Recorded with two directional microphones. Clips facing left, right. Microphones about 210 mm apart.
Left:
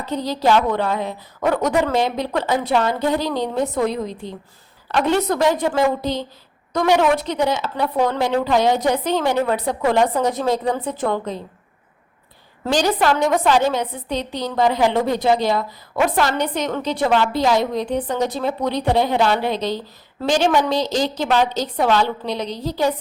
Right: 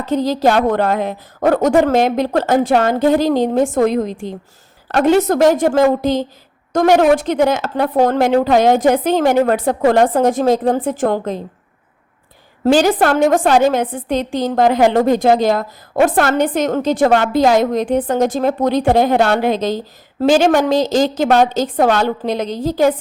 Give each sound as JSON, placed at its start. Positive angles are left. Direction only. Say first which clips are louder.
{"t": 0.3, "sound": "a woman's voice", "louder": "right 2 dB", "side_deg": -50}
{"t": 5.2, "sound": "a woman's voice", "louder": "right 6 dB", "side_deg": -45}
{"t": 12.8, "sound": "a woman's voice", "louder": "right 5 dB", "side_deg": -50}